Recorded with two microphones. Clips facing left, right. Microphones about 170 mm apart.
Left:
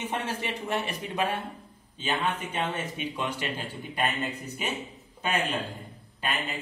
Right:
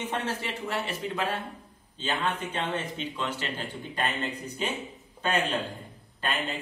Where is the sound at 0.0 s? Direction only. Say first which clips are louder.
Even; 10° left (ahead or behind).